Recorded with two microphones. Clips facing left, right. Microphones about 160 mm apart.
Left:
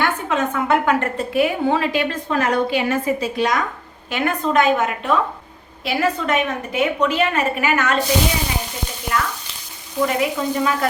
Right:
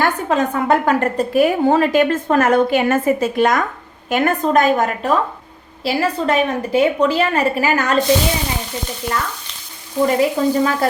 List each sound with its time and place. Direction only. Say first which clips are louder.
0.0 s a woman's voice: right 3 dB; 35° right (ahead or behind)
9.1 s frying: even; 15° left (ahead or behind)
10.2 s a woman's voice: right 5 dB; 35° right (ahead or behind)